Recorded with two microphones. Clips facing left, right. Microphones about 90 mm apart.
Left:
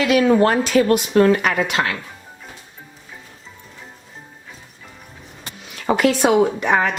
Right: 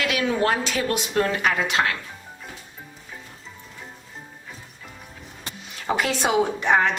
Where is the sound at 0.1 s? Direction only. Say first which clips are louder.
Left 9 dB; 40° left (ahead or behind); by 1.8 s 60° left (ahead or behind).